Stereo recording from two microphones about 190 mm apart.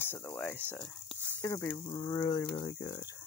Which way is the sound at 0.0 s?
10° left (ahead or behind).